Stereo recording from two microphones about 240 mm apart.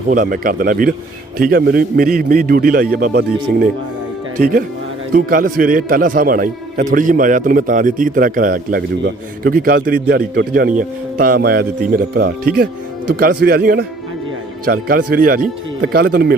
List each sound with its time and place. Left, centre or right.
0.1 s a man's voice: right